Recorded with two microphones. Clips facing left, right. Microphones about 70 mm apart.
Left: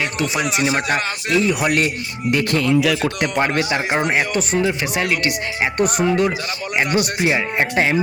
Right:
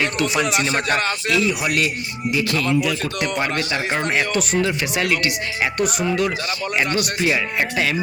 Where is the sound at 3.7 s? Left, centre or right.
Centre.